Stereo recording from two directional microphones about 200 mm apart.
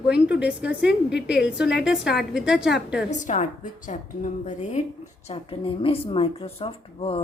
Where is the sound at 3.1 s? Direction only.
40° left (ahead or behind).